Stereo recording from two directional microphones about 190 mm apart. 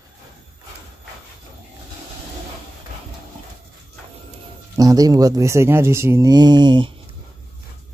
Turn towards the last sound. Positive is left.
turn(degrees=-25)  # may be behind; listen again after turning